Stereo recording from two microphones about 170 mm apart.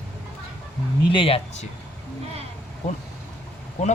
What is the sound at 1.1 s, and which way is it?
Speech, 30° left (ahead or behind).